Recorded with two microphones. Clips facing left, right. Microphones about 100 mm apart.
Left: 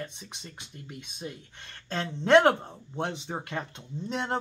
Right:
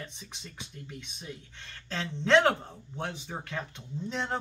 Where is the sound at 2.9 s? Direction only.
20° left (ahead or behind).